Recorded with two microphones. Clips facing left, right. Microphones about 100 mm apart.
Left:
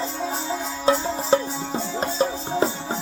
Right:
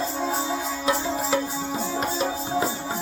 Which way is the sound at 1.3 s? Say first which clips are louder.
Left 6 dB; 30° left (ahead or behind).